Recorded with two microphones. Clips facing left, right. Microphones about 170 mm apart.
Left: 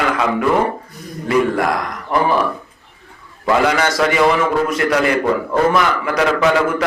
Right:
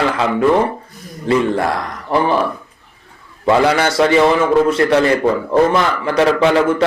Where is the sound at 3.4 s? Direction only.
30° right (ahead or behind).